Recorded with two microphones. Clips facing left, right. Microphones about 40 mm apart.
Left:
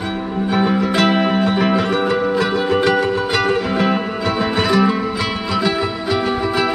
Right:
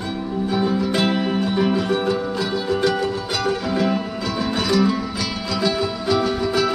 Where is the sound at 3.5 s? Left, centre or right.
Left.